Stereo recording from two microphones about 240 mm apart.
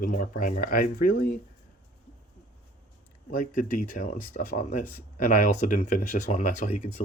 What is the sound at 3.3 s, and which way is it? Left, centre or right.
Speech, left.